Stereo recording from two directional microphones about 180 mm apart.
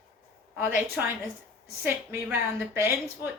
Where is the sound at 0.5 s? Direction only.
10° right (ahead or behind).